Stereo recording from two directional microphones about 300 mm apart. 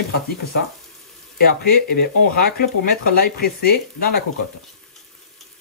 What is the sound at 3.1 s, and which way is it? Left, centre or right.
Speech, left.